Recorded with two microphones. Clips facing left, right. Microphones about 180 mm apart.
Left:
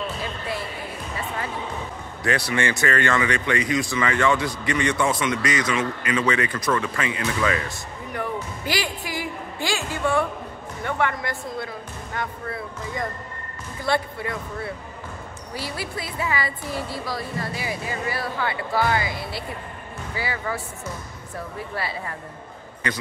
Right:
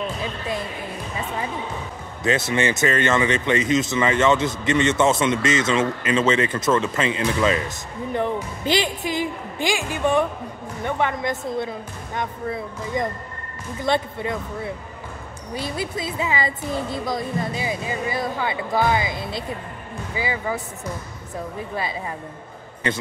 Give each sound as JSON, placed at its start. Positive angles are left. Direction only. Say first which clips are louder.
{"t": 0.0, "sound": "a sound", "louder": "right 2 dB", "side_deg": -20}
{"t": 2.2, "sound": "speech", "louder": "right 3 dB", "side_deg": -20}
{"t": 21.7, "sound": "speech", "louder": "right 2 dB", "side_deg": -20}